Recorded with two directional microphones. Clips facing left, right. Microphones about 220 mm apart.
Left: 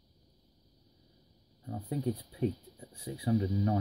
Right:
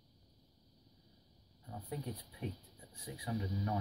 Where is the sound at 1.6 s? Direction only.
35° left (ahead or behind).